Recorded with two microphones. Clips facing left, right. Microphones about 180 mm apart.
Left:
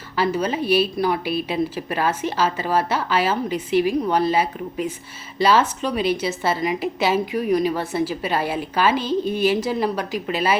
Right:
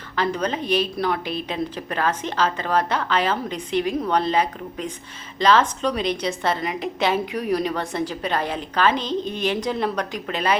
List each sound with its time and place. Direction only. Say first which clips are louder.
0.2 s a woman's voice: left 2 dB; 5° left (ahead or behind)